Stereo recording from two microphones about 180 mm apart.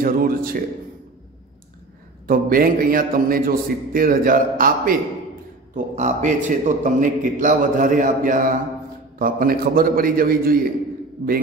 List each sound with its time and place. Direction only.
0.0 s a man's voice: 55° right (ahead or behind)
2.2 s a man's voice: 50° right (ahead or behind)
5.9 s a man's voice: 40° right (ahead or behind)